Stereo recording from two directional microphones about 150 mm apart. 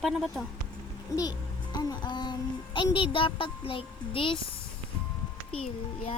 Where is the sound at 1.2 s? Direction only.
25° left (ahead or behind).